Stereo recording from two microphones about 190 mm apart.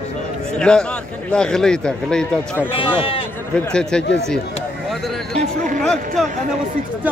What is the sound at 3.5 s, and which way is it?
Speech, 5° left (ahead or behind).